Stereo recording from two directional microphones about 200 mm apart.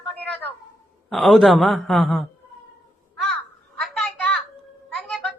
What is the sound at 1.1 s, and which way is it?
A man's voice, centre (ahead or behind).